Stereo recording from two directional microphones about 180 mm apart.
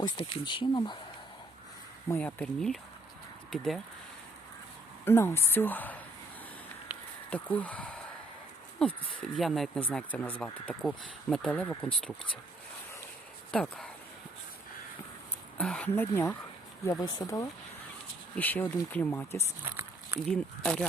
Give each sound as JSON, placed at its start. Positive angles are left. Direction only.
{"t": 0.0, "sound": "speech", "side_deg": 30}
{"t": 2.0, "sound": "speech", "side_deg": 10}
{"t": 5.0, "sound": "speech", "side_deg": 15}
{"t": 7.3, "sound": "speech", "side_deg": 10}
{"t": 13.5, "sound": "speech", "side_deg": 5}
{"t": 15.5, "sound": "speech", "side_deg": 5}